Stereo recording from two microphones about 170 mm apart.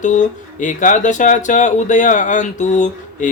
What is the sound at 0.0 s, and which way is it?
Speech, 45° left (ahead or behind).